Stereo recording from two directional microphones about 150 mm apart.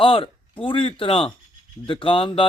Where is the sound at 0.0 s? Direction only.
35° left (ahead or behind).